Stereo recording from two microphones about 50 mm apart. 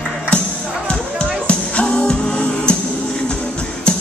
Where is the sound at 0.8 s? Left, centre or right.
Left.